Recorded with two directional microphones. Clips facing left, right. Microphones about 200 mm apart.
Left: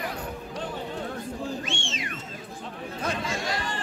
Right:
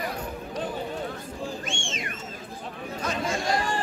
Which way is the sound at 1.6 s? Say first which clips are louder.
Even; 50° right (ahead or behind).